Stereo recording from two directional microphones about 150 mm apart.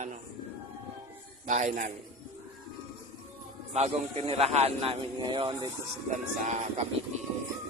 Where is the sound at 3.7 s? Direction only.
45° right (ahead or behind).